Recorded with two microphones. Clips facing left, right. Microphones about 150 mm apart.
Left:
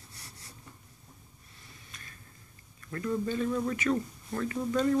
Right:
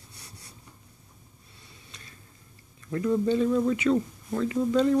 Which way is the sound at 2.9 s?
15° right (ahead or behind).